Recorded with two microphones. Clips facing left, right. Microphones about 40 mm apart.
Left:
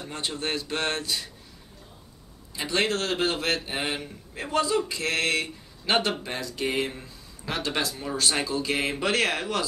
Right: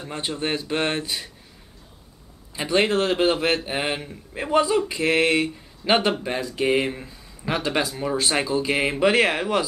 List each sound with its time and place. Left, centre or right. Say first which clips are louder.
0.0 s a man's voice: right 4 dB; centre
2.5 s a man's voice: right 5 dB; centre